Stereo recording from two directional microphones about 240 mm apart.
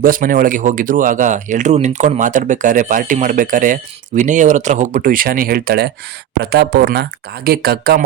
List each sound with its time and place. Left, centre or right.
0.0 s speech: right